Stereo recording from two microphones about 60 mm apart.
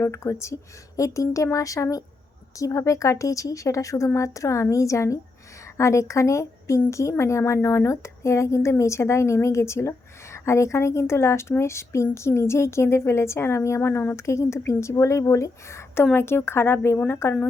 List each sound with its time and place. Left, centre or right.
0.0 s a woman's voice: left
16.1 s a woman's voice: left